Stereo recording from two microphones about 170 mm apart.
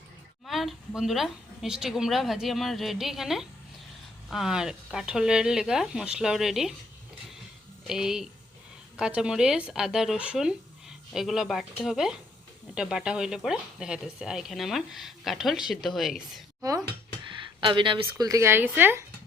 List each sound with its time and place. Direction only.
0.4 s speech: centre (ahead or behind)
7.9 s speech: 5° right (ahead or behind)
17.2 s a sound: 30° right (ahead or behind)
18.0 s speech: 20° right (ahead or behind)